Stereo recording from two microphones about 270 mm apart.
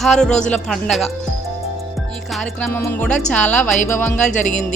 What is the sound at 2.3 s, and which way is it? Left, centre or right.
Speech, centre.